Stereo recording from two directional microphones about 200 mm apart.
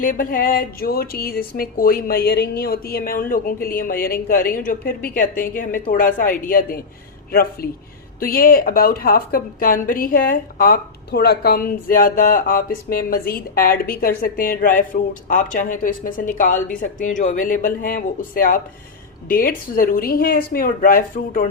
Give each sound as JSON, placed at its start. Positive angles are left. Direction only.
{"t": 0.0, "sound": "a woman's voice", "side_deg": 45}